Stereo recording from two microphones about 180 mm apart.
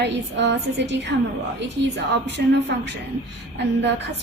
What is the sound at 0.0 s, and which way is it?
A woman's voice, 80° right.